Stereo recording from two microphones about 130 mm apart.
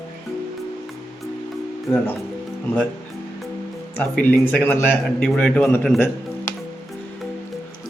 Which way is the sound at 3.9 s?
15° left (ahead or behind).